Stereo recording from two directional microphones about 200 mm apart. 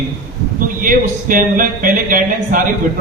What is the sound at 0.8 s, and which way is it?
Speech, 45° right (ahead or behind).